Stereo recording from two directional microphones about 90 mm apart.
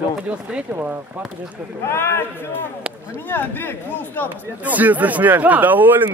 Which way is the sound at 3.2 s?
20° left (ahead or behind).